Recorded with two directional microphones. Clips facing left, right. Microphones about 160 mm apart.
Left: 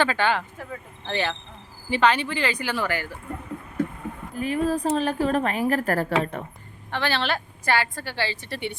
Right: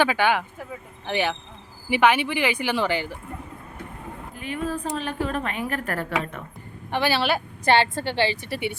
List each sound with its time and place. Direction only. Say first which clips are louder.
0.0 s speech: right 2 dB; 10° right (ahead or behind)
4.4 s a woman's voice: left 5 dB; 40° left (ahead or behind)
6.9 s speech: right 3 dB; 10° right (ahead or behind)
7.6 s a woman's voice: right 6 dB; 25° right (ahead or behind); by 8.8 s 10° right (ahead or behind)